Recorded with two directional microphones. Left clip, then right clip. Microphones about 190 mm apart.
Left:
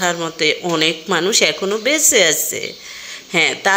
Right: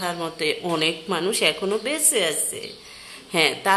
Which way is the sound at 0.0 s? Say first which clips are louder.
Left 8 dB; 15° left (ahead or behind).